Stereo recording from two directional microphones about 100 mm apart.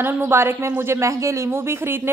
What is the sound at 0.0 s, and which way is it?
A woman's voice, 25° right (ahead or behind).